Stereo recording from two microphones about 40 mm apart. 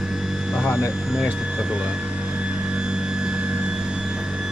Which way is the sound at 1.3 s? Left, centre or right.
Right.